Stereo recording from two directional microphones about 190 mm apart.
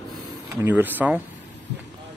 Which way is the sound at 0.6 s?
10° right (ahead or behind).